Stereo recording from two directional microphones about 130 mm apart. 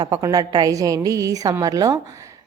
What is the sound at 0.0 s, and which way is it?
A woman's voice, 30° right (ahead or behind).